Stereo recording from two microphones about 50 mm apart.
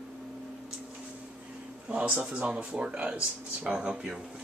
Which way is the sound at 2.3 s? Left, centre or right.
Right.